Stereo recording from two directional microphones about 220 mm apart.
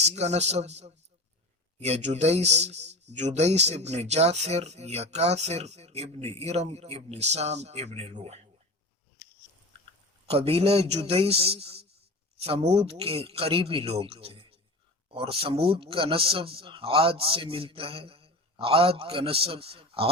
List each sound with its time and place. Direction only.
0.0 s speech: 30° right (ahead or behind)
10.2 s speech: 25° right (ahead or behind)